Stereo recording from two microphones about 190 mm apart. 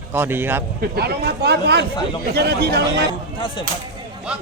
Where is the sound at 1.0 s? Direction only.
60° right (ahead or behind).